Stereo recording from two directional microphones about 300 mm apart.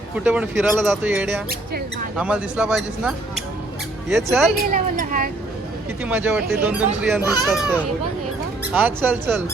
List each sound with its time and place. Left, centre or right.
0.3 s speech: centre
4.7 s speech: right
6.1 s speech: centre
8.7 s speech: centre